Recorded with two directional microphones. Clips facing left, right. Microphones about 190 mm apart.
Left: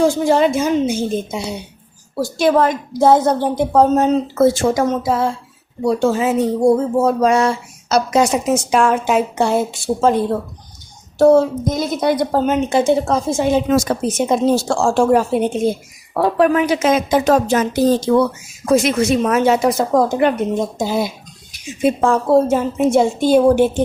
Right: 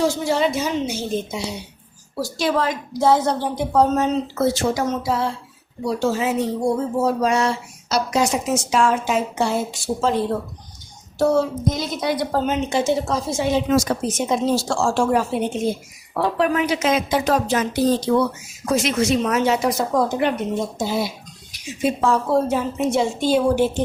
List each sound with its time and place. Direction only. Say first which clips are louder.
0.0 s a woman's voice: left 6 dB; 50° left (ahead or behind)
11.2 s a woman's voice: left 7 dB; 55° left (ahead or behind)